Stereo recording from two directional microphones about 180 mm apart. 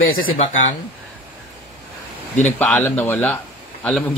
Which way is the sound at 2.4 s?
10° left (ahead or behind).